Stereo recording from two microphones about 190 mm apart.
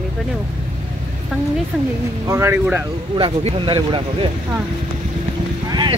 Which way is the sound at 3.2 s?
25° right (ahead or behind).